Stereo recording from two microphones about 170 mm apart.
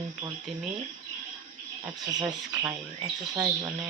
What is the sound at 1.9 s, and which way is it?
Speech, 20° right (ahead or behind).